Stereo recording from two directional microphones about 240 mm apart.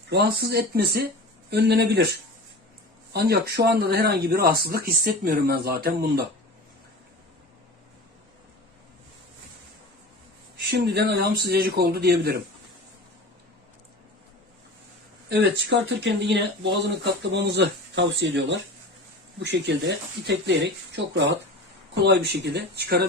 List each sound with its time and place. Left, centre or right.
0.1 s speech: right
10.7 s speech: right
15.3 s speech: right